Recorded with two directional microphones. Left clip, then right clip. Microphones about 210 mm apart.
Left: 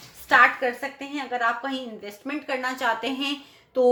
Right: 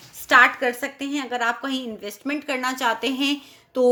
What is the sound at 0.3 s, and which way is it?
Speech, 45° right (ahead or behind).